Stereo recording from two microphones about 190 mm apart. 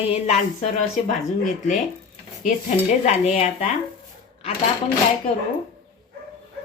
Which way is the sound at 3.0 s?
35° left (ahead or behind).